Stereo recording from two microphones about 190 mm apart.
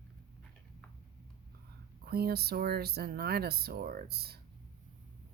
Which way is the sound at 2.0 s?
55° right (ahead or behind).